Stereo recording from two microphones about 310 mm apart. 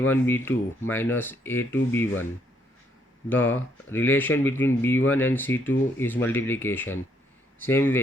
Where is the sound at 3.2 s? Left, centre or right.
Centre.